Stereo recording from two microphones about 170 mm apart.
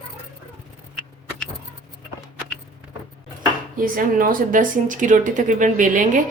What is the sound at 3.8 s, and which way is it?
Speech, 55° right (ahead or behind).